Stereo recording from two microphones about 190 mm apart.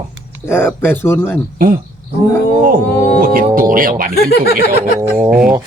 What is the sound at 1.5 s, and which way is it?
Speech, 45° right (ahead or behind).